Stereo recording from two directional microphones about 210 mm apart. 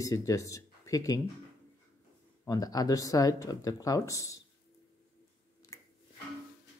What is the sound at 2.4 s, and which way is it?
Speech, 15° left (ahead or behind).